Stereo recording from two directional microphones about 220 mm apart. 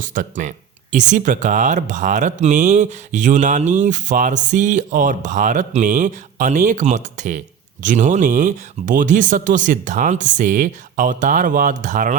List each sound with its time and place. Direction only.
0.0 s speech: 35° right (ahead or behind)